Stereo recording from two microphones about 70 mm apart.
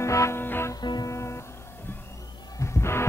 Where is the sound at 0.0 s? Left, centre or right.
Left.